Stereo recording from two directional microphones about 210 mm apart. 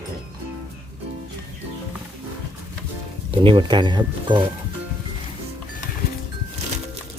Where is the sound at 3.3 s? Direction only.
25° right (ahead or behind).